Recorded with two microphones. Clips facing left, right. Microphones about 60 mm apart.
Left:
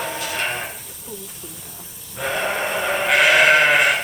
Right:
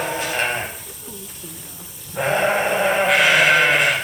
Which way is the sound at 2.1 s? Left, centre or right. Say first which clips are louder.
Right 5 dB; right.